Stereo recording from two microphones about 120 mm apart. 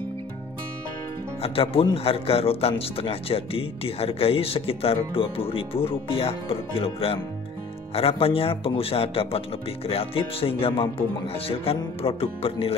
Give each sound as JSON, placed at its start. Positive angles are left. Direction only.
{"t": 1.4, "sound": "speech", "side_deg": 50}